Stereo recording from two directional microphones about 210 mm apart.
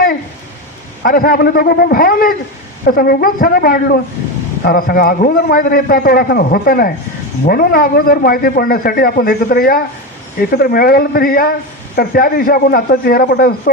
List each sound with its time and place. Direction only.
1.0 s a man's voice: 45° left (ahead or behind)